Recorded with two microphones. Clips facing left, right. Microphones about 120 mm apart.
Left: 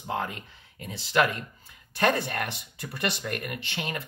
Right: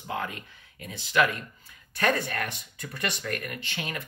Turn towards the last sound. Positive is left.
turn(degrees=25)  # may be behind; listen again after turning